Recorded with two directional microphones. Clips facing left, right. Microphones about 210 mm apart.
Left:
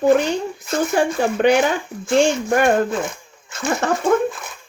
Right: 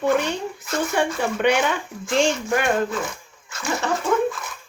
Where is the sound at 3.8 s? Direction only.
50° left (ahead or behind).